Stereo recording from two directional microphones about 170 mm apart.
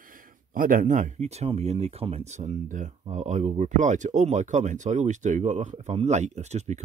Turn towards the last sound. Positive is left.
turn(degrees=-40)  # may be behind; listen again after turning